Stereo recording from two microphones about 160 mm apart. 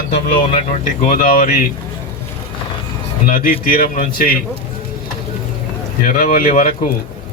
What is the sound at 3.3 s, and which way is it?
Speech, 65° left (ahead or behind).